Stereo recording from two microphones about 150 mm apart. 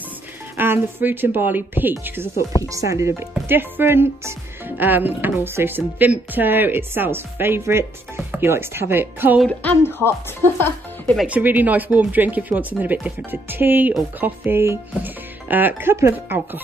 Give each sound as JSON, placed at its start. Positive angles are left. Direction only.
{"t": 0.6, "sound": "speech", "side_deg": -15}
{"t": 9.5, "sound": "speech", "side_deg": 10}
{"t": 11.1, "sound": "speech", "side_deg": -10}